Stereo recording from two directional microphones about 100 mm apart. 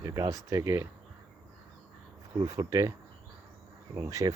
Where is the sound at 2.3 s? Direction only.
40° right (ahead or behind).